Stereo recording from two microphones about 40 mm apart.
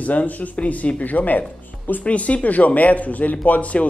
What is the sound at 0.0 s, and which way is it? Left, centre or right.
Speech, left.